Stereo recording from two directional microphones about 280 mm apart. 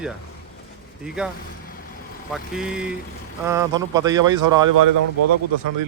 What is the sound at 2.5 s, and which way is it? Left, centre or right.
Speech, centre.